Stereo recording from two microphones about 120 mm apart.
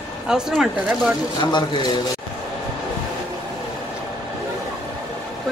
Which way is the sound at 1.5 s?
40° left (ahead or behind).